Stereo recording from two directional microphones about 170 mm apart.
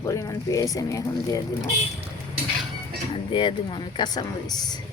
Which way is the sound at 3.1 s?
30° left (ahead or behind).